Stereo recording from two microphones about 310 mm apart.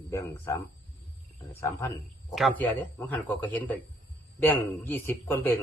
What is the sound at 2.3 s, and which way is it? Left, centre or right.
A man's voice, centre.